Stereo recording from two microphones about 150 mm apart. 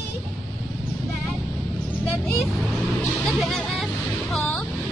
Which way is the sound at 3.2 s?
Centre (ahead or behind).